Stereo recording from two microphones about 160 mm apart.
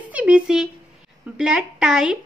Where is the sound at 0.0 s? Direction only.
10° right (ahead or behind).